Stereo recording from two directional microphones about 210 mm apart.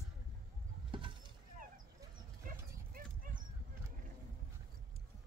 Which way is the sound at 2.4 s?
40° right (ahead or behind).